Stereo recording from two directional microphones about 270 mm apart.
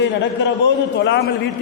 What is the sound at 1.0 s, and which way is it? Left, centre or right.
Speech, left.